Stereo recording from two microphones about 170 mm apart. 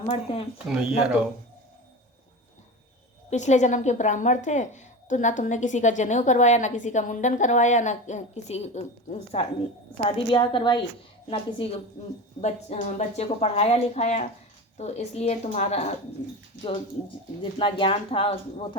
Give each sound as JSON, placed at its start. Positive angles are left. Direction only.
{"t": 0.1, "sound": "a woman's voice", "side_deg": 35}
{"t": 0.7, "sound": "speech", "side_deg": -5}
{"t": 3.2, "sound": "a woman's voice", "side_deg": 45}
{"t": 17.6, "sound": "a woman's voice", "side_deg": 30}